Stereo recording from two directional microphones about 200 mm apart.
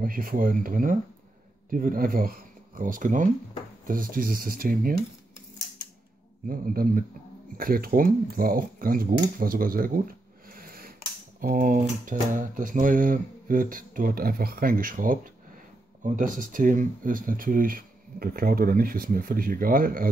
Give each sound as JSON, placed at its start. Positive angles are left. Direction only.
{"t": 0.0, "sound": "speech", "side_deg": -45}
{"t": 6.4, "sound": "speech", "side_deg": -45}
{"t": 10.5, "sound": "a sound", "side_deg": -45}
{"t": 11.4, "sound": "speech", "side_deg": -45}